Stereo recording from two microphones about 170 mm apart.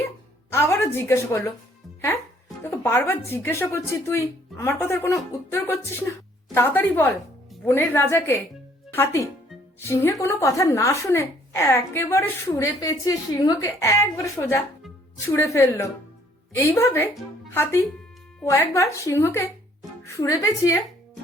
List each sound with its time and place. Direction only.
0.5 s a woman's voice: 15° left (ahead or behind)
2.6 s a woman's voice: 15° left (ahead or behind)